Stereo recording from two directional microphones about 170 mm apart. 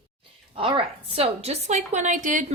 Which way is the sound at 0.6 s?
30° right (ahead or behind).